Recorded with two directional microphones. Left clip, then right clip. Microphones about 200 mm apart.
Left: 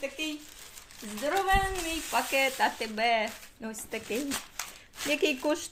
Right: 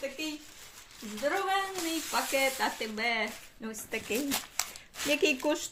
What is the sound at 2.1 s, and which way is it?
Sizzle, 20° left (ahead or behind).